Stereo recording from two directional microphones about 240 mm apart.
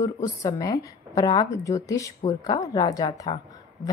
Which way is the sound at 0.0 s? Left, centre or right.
Centre.